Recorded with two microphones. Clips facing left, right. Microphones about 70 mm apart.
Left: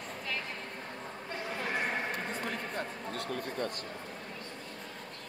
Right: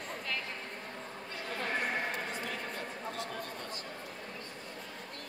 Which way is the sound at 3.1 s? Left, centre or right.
Left.